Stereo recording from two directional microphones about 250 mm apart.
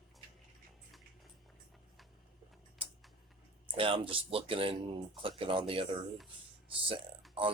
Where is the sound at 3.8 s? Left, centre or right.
Right.